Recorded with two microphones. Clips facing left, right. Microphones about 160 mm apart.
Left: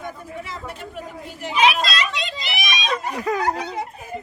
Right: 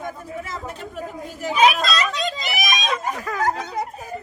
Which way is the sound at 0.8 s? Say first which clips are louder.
Right 2 dB; 40° right (ahead or behind).